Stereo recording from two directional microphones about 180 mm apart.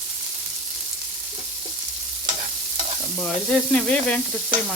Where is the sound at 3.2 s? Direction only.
5° left (ahead or behind).